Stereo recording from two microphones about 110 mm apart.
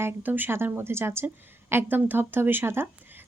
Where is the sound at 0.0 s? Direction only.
15° right (ahead or behind).